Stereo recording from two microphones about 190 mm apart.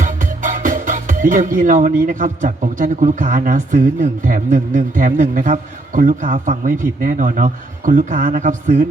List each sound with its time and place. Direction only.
0.0 s speech: 45° right (ahead or behind)